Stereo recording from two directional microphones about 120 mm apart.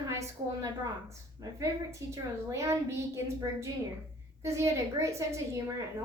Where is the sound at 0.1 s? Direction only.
25° right (ahead or behind).